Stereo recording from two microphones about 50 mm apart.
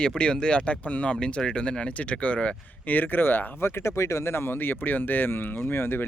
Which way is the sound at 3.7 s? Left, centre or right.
Left.